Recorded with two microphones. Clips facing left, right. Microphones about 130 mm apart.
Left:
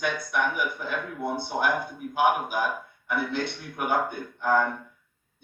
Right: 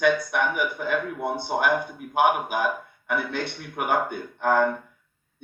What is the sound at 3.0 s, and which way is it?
A man's voice, 55° right (ahead or behind).